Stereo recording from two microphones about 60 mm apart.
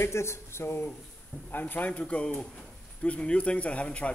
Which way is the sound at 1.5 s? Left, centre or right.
Left.